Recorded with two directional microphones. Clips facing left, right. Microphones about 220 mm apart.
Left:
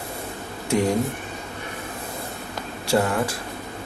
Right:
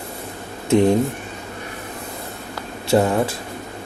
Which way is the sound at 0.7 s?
20° right (ahead or behind).